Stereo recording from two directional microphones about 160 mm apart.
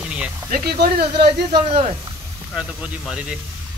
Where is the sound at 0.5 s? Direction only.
75° right (ahead or behind).